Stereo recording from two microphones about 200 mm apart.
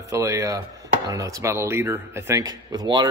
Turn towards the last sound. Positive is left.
turn(degrees=-20)  # may be behind; listen again after turning